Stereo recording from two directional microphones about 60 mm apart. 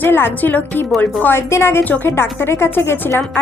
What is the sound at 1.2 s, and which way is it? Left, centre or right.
Speech, left.